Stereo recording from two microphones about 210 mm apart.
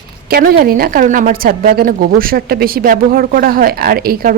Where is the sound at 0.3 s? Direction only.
45° right (ahead or behind).